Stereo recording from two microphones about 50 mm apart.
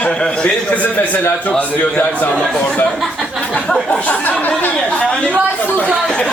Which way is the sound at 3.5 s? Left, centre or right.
Centre.